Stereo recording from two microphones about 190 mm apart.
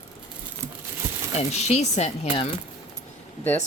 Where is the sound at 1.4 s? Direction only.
35° left (ahead or behind).